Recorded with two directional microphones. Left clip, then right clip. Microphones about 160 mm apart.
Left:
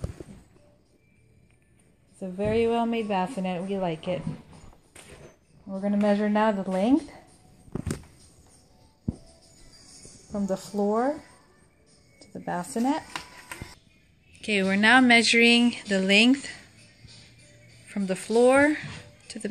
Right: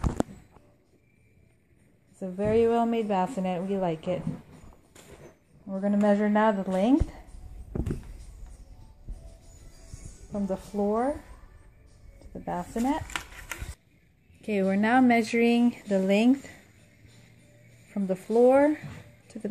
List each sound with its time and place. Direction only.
2.1 s speech: 10° right (ahead or behind)
5.7 s a sound: 5° right (ahead or behind)
6.0 s a woman's voice: 5° right (ahead or behind)
10.3 s speech: 10° left (ahead or behind)
12.2 s speech: 10° left (ahead or behind)
14.4 s speech: 15° right (ahead or behind)
17.9 s speech: 15° right (ahead or behind)